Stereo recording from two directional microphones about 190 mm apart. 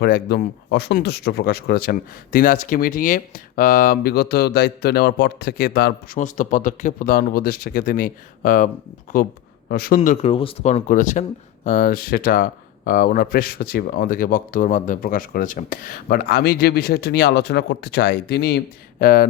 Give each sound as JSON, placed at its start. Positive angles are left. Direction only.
{"t": 0.0, "sound": "speech", "side_deg": 55}